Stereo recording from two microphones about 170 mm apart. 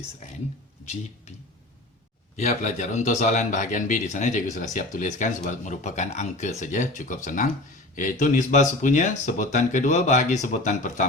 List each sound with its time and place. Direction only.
2.3 s a man's voice: 45° left (ahead or behind)